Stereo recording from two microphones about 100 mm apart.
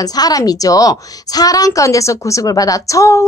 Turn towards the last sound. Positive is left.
turn(degrees=30)  # may be behind; listen again after turning